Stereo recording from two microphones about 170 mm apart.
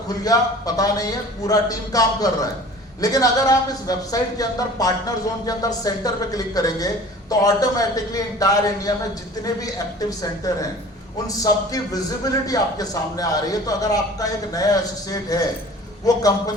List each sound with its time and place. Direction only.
0.1 s speech: 20° left (ahead or behind)